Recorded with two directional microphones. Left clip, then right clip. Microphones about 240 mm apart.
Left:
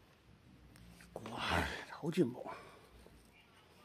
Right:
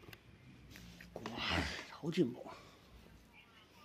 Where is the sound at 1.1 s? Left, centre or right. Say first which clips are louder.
Left 1 dB; left.